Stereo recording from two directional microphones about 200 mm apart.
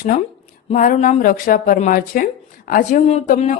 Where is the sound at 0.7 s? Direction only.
40° left (ahead or behind).